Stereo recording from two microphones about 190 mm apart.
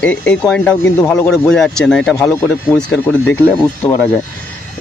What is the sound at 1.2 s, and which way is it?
Speech, 5° left (ahead or behind).